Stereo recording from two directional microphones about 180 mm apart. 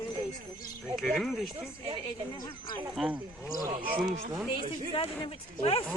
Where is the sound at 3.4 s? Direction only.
15° right (ahead or behind).